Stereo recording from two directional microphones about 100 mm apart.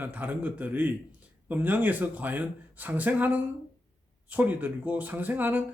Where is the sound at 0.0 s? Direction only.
15° right (ahead or behind).